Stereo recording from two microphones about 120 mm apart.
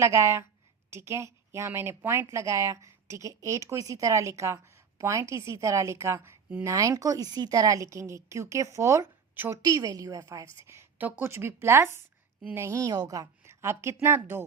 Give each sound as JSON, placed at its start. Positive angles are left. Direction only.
{"t": 0.0, "sound": "speech", "side_deg": -25}
{"t": 9.6, "sound": "a woman's voice", "side_deg": -30}